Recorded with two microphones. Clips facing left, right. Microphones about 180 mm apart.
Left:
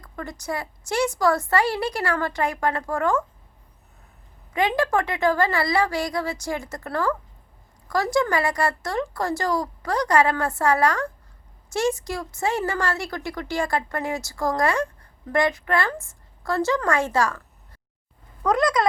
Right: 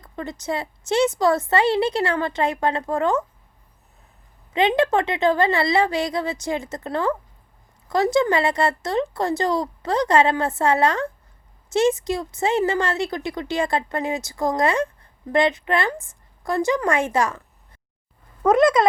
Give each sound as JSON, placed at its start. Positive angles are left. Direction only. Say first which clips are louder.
{"t": 0.0, "sound": "speech", "louder": "right 3 dB", "side_deg": -20}
{"t": 4.8, "sound": "a woman's voice", "louder": "right 3 dB", "side_deg": -20}
{"t": 18.4, "sound": "speech", "louder": "right 5 dB", "side_deg": -25}